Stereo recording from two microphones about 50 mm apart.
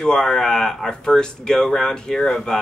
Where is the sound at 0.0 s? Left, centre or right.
Centre.